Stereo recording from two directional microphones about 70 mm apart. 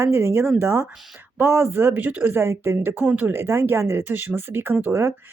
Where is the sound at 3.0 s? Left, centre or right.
Right.